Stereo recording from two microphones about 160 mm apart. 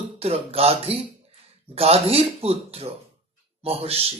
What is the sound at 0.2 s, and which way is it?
Speech, 40° right (ahead or behind).